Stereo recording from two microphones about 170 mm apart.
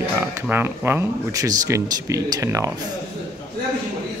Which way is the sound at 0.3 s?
15° right (ahead or behind).